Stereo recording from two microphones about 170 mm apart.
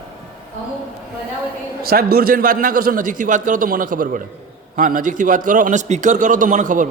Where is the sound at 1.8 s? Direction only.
60° right (ahead or behind).